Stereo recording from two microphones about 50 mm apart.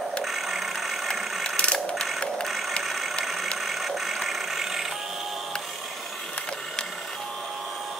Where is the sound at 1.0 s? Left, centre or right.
Centre.